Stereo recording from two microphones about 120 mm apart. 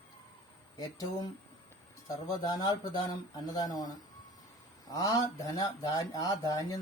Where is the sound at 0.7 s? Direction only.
30° left (ahead or behind).